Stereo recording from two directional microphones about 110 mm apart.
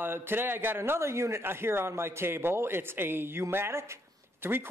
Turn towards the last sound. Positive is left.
turn(degrees=-20)  # may be behind; listen again after turning